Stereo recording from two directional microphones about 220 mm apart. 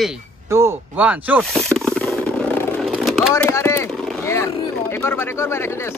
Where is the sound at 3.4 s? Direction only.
10° left (ahead or behind).